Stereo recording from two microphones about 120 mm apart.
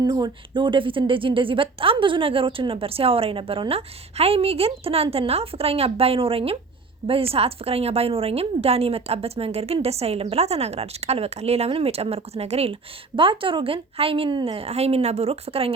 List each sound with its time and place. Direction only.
0.0 s a woman's voice: 35° right (ahead or behind); by 12.7 s 60° right (ahead or behind)
13.1 s speech: 45° right (ahead or behind)